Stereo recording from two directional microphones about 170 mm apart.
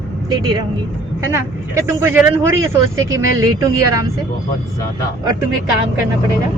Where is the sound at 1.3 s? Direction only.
15° right (ahead or behind).